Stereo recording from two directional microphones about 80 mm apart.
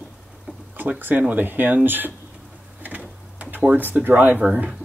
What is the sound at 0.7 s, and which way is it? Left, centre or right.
Speech, right.